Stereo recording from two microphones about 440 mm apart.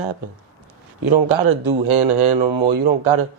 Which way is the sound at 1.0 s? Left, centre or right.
Right.